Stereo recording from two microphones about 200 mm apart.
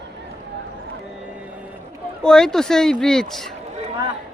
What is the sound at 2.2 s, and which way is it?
Speech, 5° left (ahead or behind).